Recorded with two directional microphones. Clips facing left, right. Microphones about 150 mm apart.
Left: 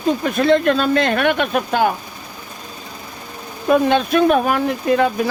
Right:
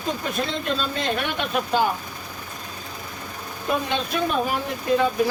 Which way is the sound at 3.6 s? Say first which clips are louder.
Left 10 dB; 60° left (ahead or behind).